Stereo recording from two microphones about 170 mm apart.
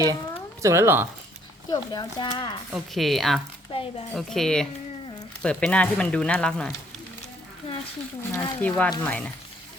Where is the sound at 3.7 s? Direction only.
35° left (ahead or behind).